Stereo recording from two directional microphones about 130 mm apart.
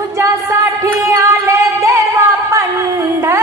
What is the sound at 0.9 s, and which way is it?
Music, 20° right (ahead or behind).